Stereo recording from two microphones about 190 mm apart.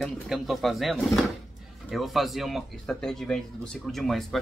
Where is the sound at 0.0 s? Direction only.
Centre (ahead or behind).